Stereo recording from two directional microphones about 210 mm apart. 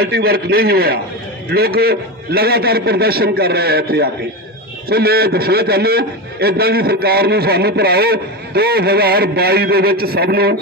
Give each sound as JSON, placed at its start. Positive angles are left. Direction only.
{"t": 0.0, "sound": "a man's voice", "side_deg": -45}